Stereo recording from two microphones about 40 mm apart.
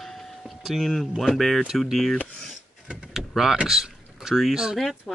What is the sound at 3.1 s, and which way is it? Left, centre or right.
Power windows, centre.